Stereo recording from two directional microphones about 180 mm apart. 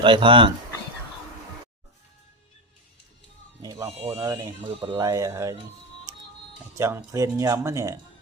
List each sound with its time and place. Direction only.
0.0 s speech: 30° right (ahead or behind)
3.6 s speech: 20° right (ahead or behind)
6.1 s music: 20° right (ahead or behind)
6.7 s speech: 15° right (ahead or behind)